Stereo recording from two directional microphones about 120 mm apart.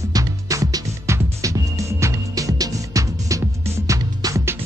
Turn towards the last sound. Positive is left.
turn(degrees=-25)  # may be behind; listen again after turning